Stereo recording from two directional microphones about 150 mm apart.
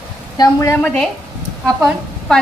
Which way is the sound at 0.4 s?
20° left (ahead or behind).